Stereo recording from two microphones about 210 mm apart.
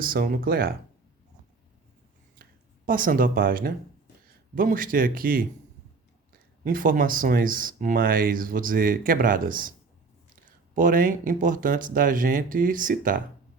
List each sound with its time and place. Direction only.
0.0 s speech: 45° right (ahead or behind)
2.4 s speech: 40° right (ahead or behind)
6.7 s speech: 40° right (ahead or behind)
10.8 s speech: 40° right (ahead or behind)